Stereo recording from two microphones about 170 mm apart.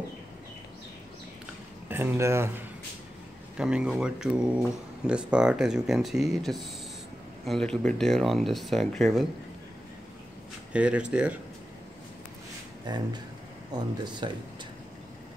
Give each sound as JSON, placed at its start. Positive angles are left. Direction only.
{"t": 1.9, "sound": "speech", "side_deg": -15}
{"t": 3.5, "sound": "speech", "side_deg": -5}
{"t": 10.7, "sound": "speech", "side_deg": -5}
{"t": 12.8, "sound": "speech", "side_deg": -25}